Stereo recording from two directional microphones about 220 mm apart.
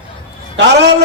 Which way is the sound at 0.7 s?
50° right (ahead or behind).